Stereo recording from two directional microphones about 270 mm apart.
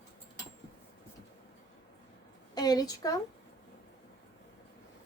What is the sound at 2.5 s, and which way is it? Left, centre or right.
Speech, centre.